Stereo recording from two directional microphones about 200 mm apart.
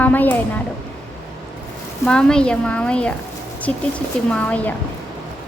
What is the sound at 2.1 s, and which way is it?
A woman's voice, 5° left (ahead or behind).